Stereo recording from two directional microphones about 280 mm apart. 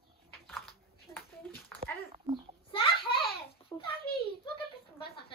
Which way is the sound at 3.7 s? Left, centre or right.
Centre.